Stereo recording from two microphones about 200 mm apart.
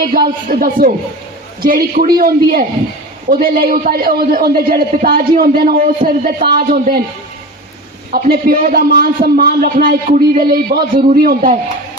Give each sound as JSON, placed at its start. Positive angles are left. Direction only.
{"t": 0.0, "sound": "a man's voice", "side_deg": -45}
{"t": 8.1, "sound": "a man's voice", "side_deg": -45}